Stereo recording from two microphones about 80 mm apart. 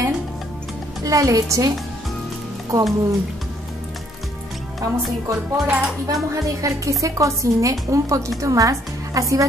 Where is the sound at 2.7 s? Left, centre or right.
Right.